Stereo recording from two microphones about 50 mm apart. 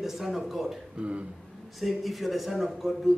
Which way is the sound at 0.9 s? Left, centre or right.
Right.